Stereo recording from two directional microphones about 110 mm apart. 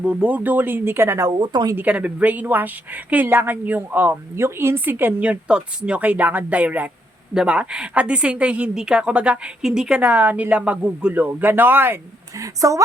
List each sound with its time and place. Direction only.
0.0 s speech: 10° right (ahead or behind)
1.3 s speech: 40° right (ahead or behind)
1.7 s speech: 15° right (ahead or behind)
12.4 s speech: 30° right (ahead or behind)